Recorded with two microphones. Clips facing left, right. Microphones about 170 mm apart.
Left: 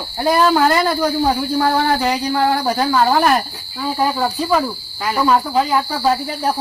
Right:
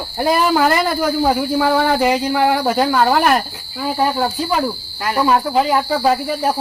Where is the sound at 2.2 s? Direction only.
20° right (ahead or behind).